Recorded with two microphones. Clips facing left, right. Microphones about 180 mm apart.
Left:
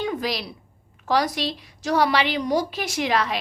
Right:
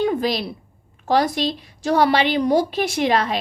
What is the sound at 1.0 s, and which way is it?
A woman's voice, 25° right (ahead or behind).